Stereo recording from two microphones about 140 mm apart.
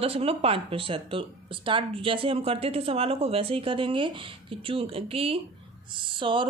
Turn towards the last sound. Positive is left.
turn(degrees=-35)  # may be behind; listen again after turning